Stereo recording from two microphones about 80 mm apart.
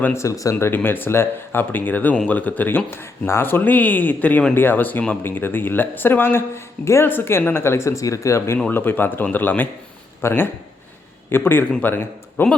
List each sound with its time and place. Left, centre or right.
0.1 s speech: left
0.5 s speech: left
8.7 s a man's voice: left